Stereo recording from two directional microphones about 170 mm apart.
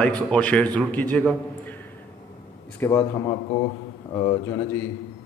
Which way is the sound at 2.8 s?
15° left (ahead or behind).